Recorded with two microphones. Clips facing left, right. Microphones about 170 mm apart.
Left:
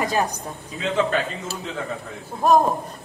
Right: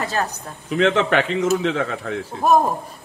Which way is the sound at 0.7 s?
80° right.